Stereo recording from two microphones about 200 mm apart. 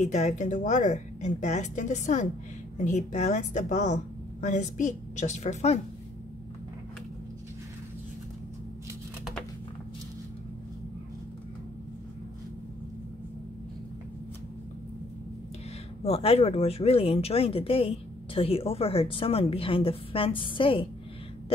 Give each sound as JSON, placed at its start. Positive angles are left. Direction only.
{"t": 0.0, "sound": "a woman's voice", "side_deg": 35}
{"t": 16.0, "sound": "speech", "side_deg": 30}